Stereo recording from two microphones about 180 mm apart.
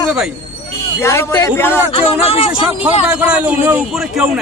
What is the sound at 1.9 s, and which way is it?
Speech, 35° left (ahead or behind).